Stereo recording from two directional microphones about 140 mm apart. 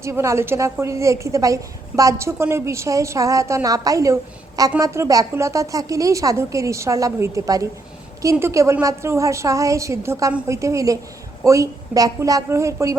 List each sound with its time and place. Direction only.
0.0 s a woman's voice: 20° right (ahead or behind)